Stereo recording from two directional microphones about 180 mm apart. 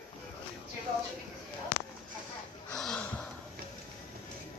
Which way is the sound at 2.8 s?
5° left (ahead or behind).